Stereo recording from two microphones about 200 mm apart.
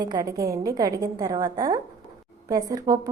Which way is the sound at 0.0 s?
20° right (ahead or behind).